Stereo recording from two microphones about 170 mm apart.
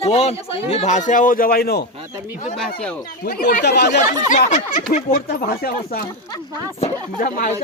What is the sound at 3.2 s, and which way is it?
Speech, 65° left (ahead or behind).